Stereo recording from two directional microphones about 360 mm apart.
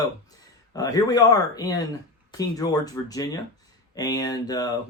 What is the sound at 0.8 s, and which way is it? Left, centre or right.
Speech, centre.